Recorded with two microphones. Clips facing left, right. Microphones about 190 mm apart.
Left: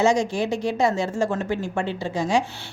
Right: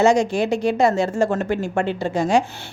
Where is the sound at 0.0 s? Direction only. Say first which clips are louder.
Right 4 dB; 65° right (ahead or behind).